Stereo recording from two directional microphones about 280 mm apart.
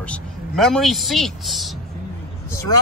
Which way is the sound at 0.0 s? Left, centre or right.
Centre.